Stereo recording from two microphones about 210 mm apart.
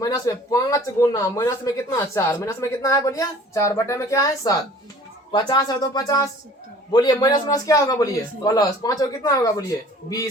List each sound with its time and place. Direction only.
0.0 s speech: 15° left (ahead or behind)